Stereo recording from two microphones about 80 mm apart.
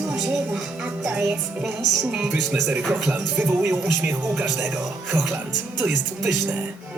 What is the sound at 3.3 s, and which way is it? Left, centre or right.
Speech, right.